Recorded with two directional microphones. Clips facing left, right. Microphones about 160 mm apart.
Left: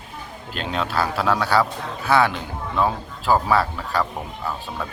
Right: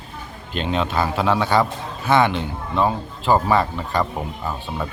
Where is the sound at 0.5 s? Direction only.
Centre (ahead or behind).